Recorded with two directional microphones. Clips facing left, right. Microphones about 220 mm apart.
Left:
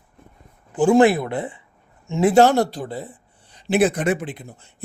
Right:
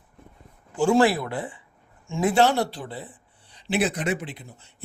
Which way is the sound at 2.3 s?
45° left (ahead or behind).